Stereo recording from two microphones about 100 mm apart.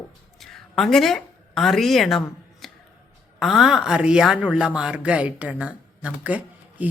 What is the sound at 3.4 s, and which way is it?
A man's voice, 5° right (ahead or behind).